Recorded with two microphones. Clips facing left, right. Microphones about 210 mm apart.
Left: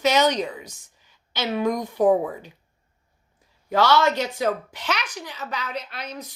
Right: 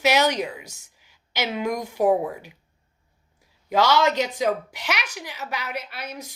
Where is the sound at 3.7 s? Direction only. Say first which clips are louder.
Even; 15° right (ahead or behind).